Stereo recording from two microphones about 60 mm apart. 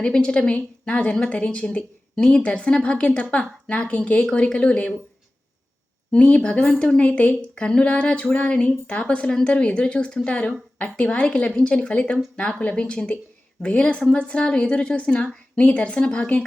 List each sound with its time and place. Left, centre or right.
0.0 s a woman's voice: centre
6.1 s a woman's voice: left